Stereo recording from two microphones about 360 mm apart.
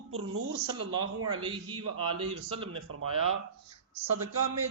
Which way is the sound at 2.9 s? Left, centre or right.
Right.